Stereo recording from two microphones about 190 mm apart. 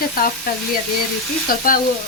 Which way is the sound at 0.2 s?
50° left (ahead or behind).